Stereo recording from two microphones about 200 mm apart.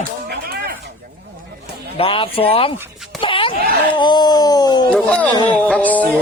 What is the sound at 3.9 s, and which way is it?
Speech, 20° left (ahead or behind).